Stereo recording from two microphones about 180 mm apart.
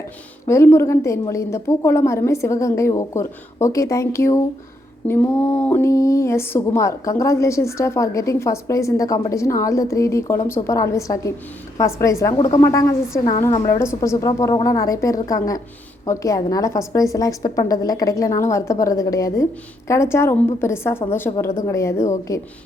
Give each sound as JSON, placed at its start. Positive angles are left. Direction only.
{"t": 0.4, "sound": "a woman's voice", "side_deg": 15}
{"t": 14.0, "sound": "a woman's voice", "side_deg": 15}